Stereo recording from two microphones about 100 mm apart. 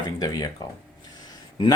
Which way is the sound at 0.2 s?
40° left (ahead or behind).